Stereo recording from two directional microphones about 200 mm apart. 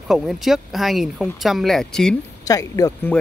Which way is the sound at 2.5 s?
15° left (ahead or behind).